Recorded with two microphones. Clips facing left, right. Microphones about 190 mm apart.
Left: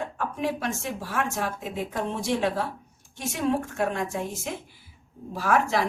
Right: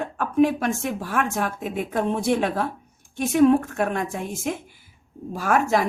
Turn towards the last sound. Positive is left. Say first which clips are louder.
# right 3 dB
turn(degrees=-45)  # may be behind; listen again after turning